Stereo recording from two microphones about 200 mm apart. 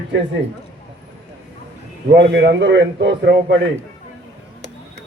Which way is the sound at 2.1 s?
60° right (ahead or behind).